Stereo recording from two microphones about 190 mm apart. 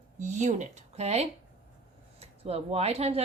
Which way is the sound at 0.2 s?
40° right (ahead or behind).